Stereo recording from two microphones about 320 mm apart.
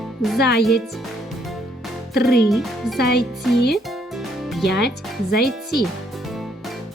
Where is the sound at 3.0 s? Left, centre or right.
Left.